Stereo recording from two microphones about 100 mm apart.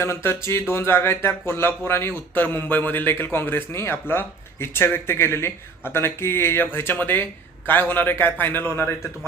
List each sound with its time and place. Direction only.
0.0 s speech: 25° left (ahead or behind)